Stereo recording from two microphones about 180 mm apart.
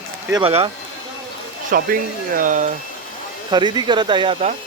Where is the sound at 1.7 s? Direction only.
50° right (ahead or behind).